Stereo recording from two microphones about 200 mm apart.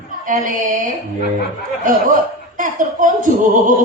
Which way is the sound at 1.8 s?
40° right (ahead or behind).